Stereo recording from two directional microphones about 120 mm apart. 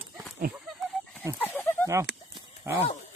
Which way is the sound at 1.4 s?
15° left (ahead or behind).